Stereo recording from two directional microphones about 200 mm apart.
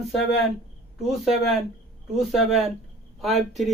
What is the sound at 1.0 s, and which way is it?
Speech, centre (ahead or behind).